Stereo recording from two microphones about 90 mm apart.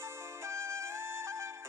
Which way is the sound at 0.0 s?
30° right (ahead or behind).